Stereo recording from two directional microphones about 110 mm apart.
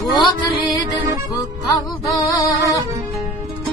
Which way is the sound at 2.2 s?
35° left (ahead or behind).